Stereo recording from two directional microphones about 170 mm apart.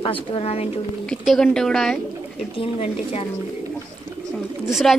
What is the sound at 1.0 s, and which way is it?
Speech, centre (ahead or behind).